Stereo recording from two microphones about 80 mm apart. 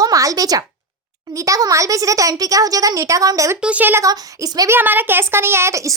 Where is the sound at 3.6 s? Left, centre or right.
Centre.